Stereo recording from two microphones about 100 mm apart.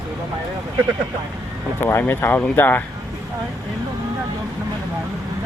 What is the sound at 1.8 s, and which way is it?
Speech, 25° left (ahead or behind).